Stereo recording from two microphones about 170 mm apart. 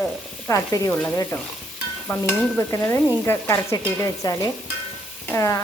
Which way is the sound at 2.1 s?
15° left (ahead or behind).